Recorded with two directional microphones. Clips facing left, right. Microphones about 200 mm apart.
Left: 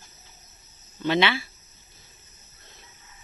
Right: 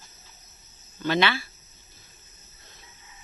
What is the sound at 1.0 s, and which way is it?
Speech, 20° left (ahead or behind).